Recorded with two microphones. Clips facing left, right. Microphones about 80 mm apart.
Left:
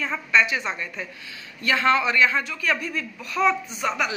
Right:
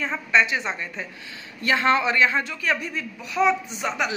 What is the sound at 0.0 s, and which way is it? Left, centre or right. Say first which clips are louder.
A man's voice: even; right.